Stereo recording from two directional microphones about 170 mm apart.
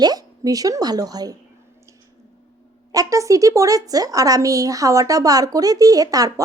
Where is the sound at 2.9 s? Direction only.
20° right (ahead or behind).